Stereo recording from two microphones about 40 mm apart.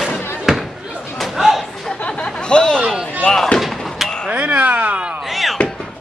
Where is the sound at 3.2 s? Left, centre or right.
Centre.